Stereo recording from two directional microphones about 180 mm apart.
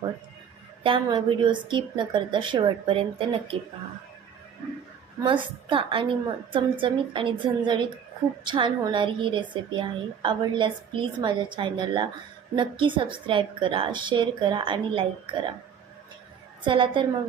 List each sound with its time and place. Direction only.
0.8 s a woman's voice: 30° right (ahead or behind)
5.2 s a woman's voice: 30° right (ahead or behind)
16.6 s a woman's voice: 30° right (ahead or behind)